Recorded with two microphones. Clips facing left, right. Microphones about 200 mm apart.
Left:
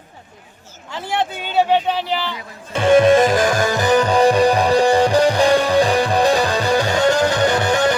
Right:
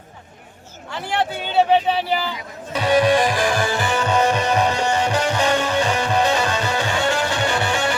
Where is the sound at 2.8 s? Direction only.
50° left (ahead or behind).